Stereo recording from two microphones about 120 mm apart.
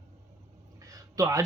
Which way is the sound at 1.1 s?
30° right (ahead or behind).